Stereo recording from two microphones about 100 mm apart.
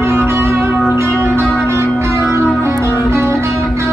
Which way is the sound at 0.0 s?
25° right (ahead or behind).